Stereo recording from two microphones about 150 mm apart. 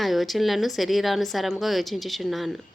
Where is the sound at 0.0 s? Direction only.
Centre (ahead or behind).